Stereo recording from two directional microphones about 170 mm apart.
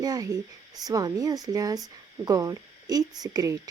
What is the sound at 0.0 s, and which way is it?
Speech, 20° right (ahead or behind).